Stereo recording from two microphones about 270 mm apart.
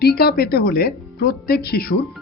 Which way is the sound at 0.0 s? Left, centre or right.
Left.